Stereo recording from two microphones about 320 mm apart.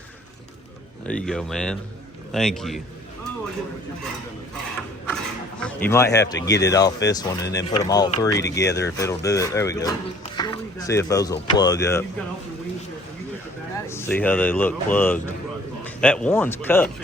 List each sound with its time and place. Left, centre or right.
1.0 s speech: centre
5.0 s speech: centre
13.7 s speech: centre